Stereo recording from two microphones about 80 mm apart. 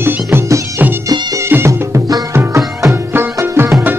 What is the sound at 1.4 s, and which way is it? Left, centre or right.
Music, right.